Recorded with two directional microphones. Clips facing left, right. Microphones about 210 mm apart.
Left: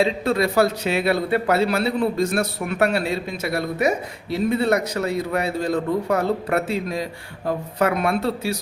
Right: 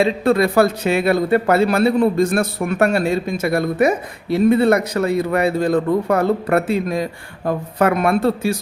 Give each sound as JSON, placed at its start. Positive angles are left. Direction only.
{"t": 0.0, "sound": "a man's voice", "side_deg": -55}